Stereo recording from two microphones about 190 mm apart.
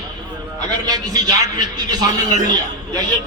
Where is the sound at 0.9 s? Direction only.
20° right (ahead or behind).